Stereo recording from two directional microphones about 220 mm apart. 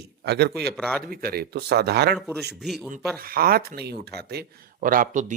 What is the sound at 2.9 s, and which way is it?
Speech, 40° right (ahead or behind).